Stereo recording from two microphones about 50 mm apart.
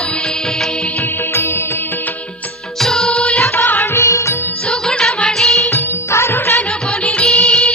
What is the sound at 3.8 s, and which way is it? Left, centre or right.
Music of bollywood, left.